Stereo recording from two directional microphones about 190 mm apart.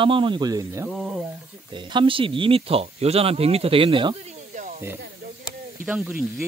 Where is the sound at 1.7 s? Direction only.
25° right (ahead or behind).